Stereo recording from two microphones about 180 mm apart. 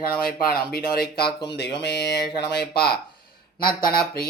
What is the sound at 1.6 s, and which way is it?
Speech, 70° left (ahead or behind).